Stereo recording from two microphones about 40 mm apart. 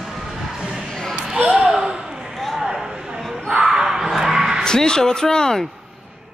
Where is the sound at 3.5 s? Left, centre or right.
Centre.